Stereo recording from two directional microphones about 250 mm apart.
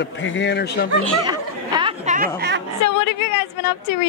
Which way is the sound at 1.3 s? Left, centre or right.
Centre.